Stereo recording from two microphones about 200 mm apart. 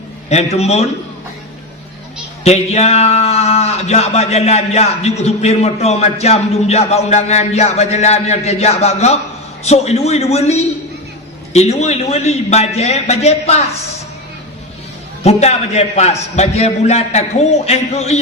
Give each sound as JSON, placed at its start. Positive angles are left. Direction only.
{"t": 0.3, "sound": "a man's voice", "side_deg": 30}
{"t": 2.4, "sound": "a man's voice", "side_deg": 30}
{"t": 15.2, "sound": "a man's voice", "side_deg": 30}